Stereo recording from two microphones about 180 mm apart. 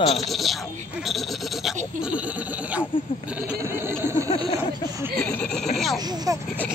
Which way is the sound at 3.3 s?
5° right (ahead or behind).